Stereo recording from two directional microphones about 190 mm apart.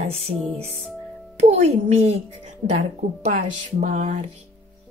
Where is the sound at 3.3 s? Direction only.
40° right (ahead or behind).